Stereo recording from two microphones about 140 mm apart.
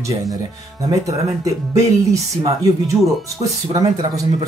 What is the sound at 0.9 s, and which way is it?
Speech, 25° right (ahead or behind).